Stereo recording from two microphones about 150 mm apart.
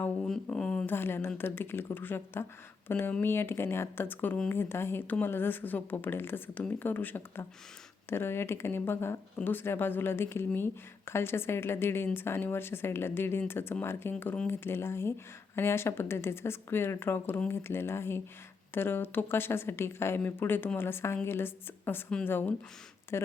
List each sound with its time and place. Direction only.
0.0 s speech: 10° left (ahead or behind)